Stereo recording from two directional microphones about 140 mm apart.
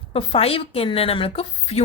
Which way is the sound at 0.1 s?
45° left (ahead or behind).